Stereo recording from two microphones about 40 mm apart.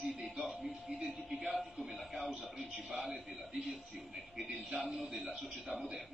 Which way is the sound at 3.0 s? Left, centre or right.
Centre.